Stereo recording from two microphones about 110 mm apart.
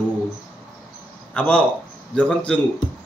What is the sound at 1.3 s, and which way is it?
A man's voice, 10° left (ahead or behind).